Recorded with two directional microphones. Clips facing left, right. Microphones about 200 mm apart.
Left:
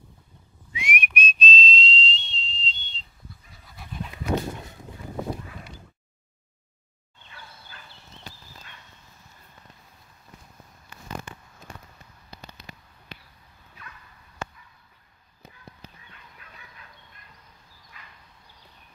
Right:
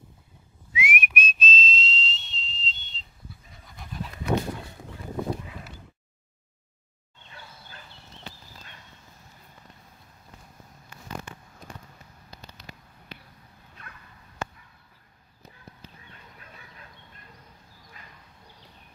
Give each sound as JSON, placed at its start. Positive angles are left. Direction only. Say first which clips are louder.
{"t": 0.7, "sound": "whistling", "louder": "right 1 dB", "side_deg": -5}
{"t": 3.6, "sound": "pant", "louder": "even", "side_deg": 5}
{"t": 16.1, "sound": "chicken", "louder": "right 2 dB", "side_deg": -35}